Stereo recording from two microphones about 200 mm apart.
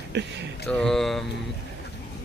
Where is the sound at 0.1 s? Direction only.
60° right (ahead or behind).